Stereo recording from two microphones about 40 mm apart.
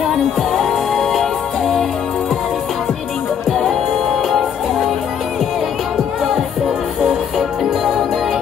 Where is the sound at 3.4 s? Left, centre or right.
Centre.